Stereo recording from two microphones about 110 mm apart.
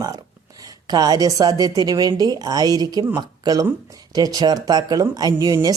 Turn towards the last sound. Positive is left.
turn(degrees=-35)  # may be behind; listen again after turning